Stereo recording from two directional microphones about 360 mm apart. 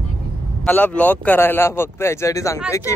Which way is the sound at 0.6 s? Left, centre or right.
Centre.